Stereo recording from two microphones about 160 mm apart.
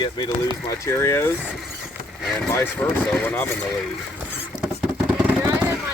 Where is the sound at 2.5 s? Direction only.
15° left (ahead or behind).